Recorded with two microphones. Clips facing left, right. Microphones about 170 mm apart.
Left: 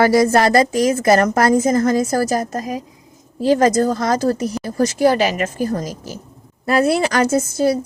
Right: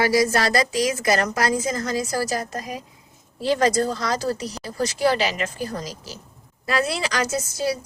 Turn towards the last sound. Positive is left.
turn(degrees=55)  # may be behind; listen again after turning